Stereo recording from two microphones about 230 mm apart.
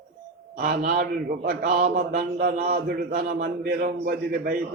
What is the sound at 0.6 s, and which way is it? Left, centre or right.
A man's voice, right.